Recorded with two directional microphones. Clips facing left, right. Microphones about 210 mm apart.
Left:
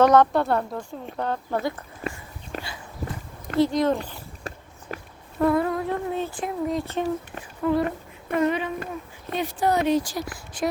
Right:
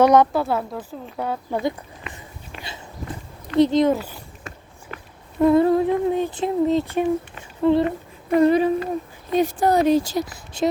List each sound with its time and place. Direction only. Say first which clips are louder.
0.0 s speech: right 2 dB; 10° right (ahead or behind)
2.0 s speech: left 8 dB; 40° left (ahead or behind)
2.6 s a sound: left 1 dB; 25° right (ahead or behind)
3.6 s humming: right 5 dB; 20° right (ahead or behind)
3.8 s speech: right 3 dB; 10° right (ahead or behind)
4.4 s a sound: left 4 dB; 35° left (ahead or behind)
5.4 s humming: right 6 dB; 25° right (ahead or behind)
5.9 s speech: right 6 dB; 15° right (ahead or behind)
6.4 s humming: right 9 dB; 25° right (ahead or behind)
6.8 s speech: right 5 dB; 15° right (ahead or behind)
7.6 s humming: right 5 dB; 25° right (ahead or behind)
8.4 s speech: right 7 dB; 35° right (ahead or behind)
10.0 s humming: right 6 dB; 25° right (ahead or behind)